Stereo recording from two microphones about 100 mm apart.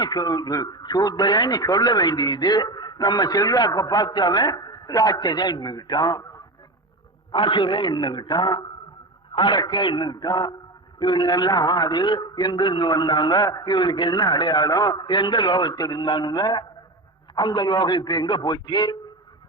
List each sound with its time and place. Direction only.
0.0 s a man's voice: 45° left (ahead or behind)
7.3 s a man's voice: 55° left (ahead or behind)